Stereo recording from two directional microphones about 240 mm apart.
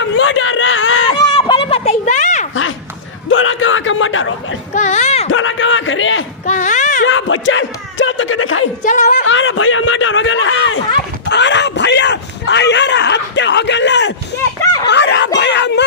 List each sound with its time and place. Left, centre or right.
0.0 s a sound: left
1.2 s a sound: left
3.2 s a man's voice: left
4.7 s speech: left
5.3 s speech: left
6.4 s speech: left
7.0 s speech: left
8.8 s speech: left
9.2 s speech: left